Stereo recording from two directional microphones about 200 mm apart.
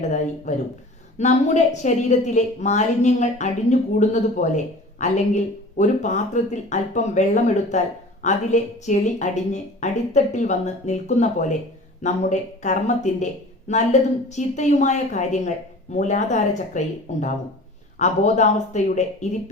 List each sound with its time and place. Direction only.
0.0 s a woman's voice: 35° left (ahead or behind)